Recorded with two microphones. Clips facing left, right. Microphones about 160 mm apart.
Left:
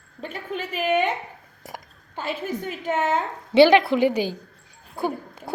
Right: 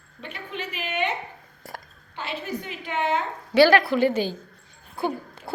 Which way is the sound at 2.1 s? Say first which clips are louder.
Left 3 dB; 45° left (ahead or behind).